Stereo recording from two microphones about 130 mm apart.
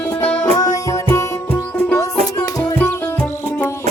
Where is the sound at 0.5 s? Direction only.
25° left (ahead or behind).